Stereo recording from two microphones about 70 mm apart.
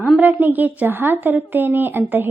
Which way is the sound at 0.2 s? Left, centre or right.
Right.